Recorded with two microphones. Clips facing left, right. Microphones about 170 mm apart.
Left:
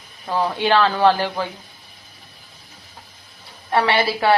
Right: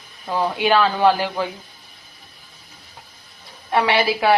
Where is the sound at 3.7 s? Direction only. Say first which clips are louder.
Even; 15° right (ahead or behind).